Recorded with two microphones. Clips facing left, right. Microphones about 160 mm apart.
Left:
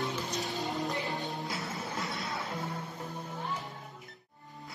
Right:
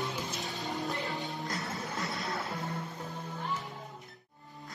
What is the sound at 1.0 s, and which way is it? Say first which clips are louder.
Music: left 1 dB; centre (ahead or behind).